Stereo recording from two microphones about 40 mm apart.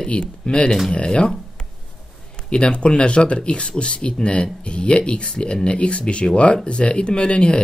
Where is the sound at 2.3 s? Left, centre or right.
Left.